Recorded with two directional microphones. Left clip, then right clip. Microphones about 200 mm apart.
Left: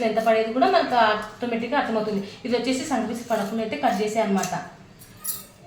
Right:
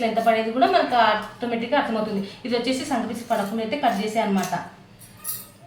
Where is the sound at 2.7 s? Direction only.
10° left (ahead or behind).